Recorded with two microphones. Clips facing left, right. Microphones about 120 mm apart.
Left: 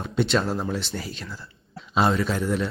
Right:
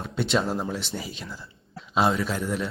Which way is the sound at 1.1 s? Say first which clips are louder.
Left 1 dB; 15° right (ahead or behind).